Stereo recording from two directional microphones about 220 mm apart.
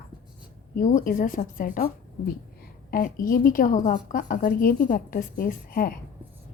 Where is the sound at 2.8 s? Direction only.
40° left (ahead or behind).